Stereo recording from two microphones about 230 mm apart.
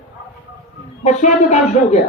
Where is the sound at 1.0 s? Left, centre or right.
Left.